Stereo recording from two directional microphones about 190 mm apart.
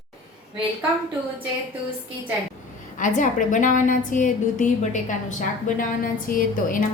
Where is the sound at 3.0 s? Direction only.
45° left (ahead or behind).